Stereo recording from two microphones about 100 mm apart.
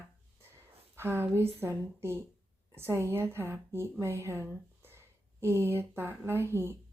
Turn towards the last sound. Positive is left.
turn(degrees=-25)  # may be behind; listen again after turning